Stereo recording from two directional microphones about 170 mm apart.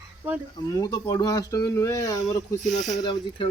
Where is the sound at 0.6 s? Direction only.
20° left (ahead or behind).